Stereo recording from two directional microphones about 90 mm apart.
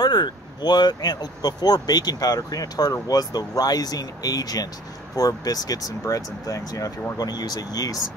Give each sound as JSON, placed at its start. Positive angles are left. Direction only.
{"t": 0.0, "sound": "speech", "side_deg": 55}